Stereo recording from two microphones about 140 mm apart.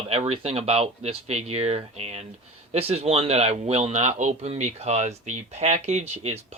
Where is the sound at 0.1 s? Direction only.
45° right (ahead or behind).